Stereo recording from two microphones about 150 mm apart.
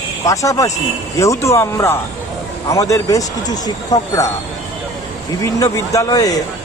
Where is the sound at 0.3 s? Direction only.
20° left (ahead or behind).